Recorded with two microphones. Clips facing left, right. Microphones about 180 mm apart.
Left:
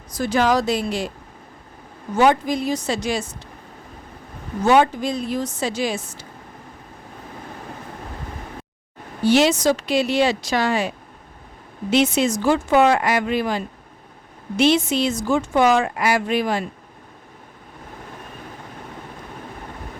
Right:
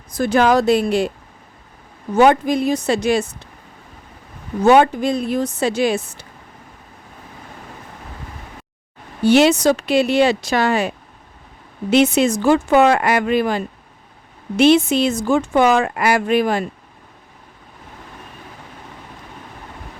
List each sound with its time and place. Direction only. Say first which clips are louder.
0.2 s speech: right 4 dB; 55° right (ahead or behind)
2.1 s speech: right 4 dB; 60° right (ahead or behind)
4.6 s speech: right 4 dB; 55° right (ahead or behind)
9.2 s speech: right 3 dB; 60° right (ahead or behind)
14.6 s speech: right 5 dB; 55° right (ahead or behind)